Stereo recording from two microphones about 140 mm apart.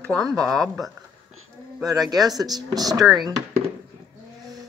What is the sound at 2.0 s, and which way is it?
Speech, 30° right (ahead or behind).